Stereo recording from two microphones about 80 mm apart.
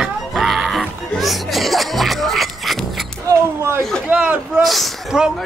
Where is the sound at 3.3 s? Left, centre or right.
Right.